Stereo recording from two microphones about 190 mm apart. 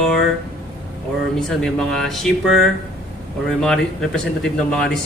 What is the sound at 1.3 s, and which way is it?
A man's voice, centre (ahead or behind).